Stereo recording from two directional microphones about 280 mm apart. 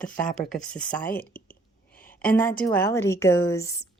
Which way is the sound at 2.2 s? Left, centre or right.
Centre.